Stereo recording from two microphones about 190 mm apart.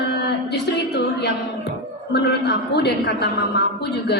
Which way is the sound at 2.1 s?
60° left (ahead or behind).